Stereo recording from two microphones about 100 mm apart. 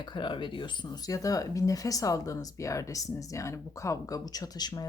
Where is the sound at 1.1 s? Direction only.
35° left (ahead or behind).